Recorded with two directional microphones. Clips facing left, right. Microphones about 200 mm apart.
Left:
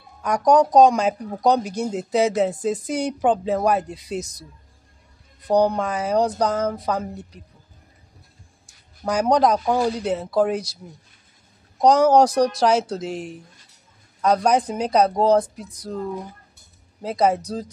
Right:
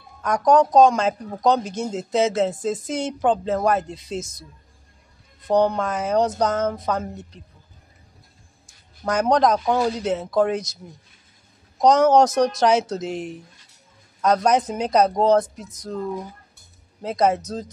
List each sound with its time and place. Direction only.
0.2 s speech: 10° left (ahead or behind)
4.2 s speech: 40° left (ahead or behind)
5.5 s speech: 15° left (ahead or behind)
9.0 s speech: 10° left (ahead or behind)
11.8 s speech: 10° left (ahead or behind)
17.0 s speech: 5° left (ahead or behind)